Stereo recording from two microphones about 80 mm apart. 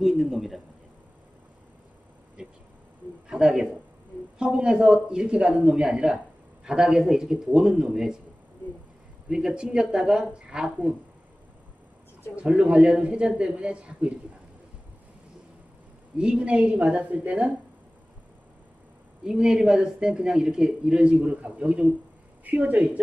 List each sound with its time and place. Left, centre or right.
0.0 s speech: centre
2.4 s a man's voice: centre
9.3 s a man's voice: centre
12.4 s a man's voice: centre
16.2 s a man's voice: centre
19.2 s a man's voice: centre